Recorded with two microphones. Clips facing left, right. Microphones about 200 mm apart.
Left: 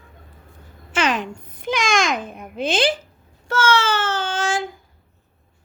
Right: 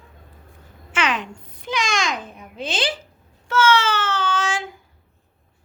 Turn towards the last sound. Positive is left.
turn(degrees=50)  # may be behind; listen again after turning